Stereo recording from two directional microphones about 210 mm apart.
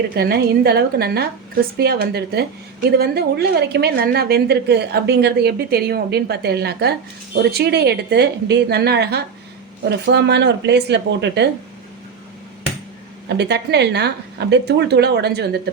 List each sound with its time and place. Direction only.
0.1 s a woman's voice: 50° right (ahead or behind)
13.2 s a woman's voice: 55° right (ahead or behind)